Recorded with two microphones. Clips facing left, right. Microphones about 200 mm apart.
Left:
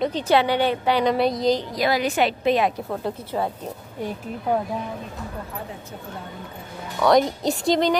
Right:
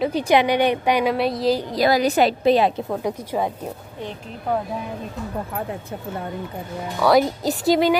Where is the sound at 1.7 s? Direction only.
35° right (ahead or behind).